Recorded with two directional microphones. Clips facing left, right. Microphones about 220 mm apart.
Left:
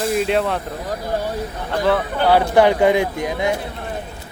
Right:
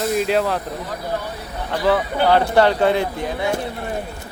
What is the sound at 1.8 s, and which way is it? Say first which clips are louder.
Speech: even; centre (ahead or behind).